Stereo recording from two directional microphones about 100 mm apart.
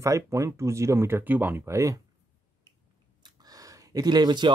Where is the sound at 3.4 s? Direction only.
35° right (ahead or behind).